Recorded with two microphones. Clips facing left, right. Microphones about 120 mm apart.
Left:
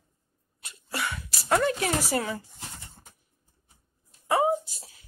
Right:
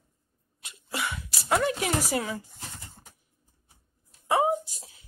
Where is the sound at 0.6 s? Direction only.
15° right (ahead or behind).